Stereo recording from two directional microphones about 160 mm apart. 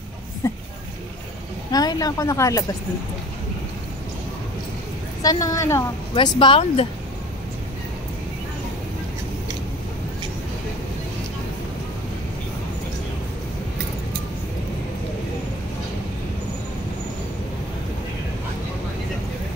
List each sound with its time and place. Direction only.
0.4 s a sound: 15° left (ahead or behind)
1.7 s speech: 25° left (ahead or behind)
5.2 s speech: 25° left (ahead or behind)
6.1 s speech: 30° left (ahead or behind)